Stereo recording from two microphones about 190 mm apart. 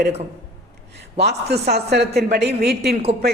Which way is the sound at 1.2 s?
60° right (ahead or behind).